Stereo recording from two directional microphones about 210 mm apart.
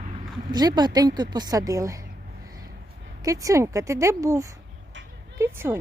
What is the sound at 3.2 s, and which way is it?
Speech, 15° right (ahead or behind).